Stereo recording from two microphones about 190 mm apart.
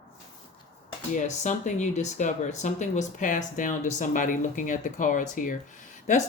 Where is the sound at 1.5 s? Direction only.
40° left (ahead or behind).